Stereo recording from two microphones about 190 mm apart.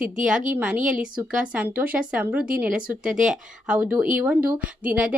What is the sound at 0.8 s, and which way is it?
Speech, 45° right (ahead or behind).